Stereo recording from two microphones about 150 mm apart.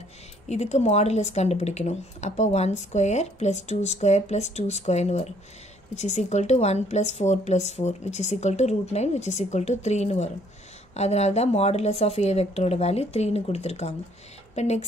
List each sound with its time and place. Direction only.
0.5 s speech: 50° left (ahead or behind)